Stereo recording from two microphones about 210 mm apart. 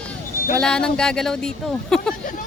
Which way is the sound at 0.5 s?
5° left (ahead or behind).